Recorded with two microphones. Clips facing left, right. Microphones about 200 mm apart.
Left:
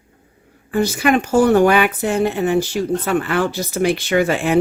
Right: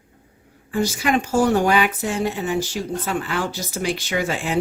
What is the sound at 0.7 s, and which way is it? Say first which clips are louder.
Speech: left 5 dB; 60° left (ahead or behind).